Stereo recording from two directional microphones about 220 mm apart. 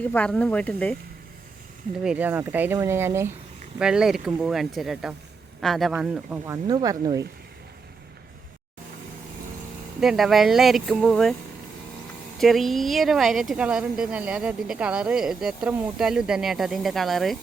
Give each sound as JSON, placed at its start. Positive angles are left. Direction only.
{"t": 0.0, "sound": "a woman's voice", "side_deg": 5}
{"t": 2.0, "sound": "a woman's voice", "side_deg": -5}
{"t": 10.0, "sound": "a woman's voice", "side_deg": 0}
{"t": 12.4, "sound": "a woman's voice", "side_deg": 0}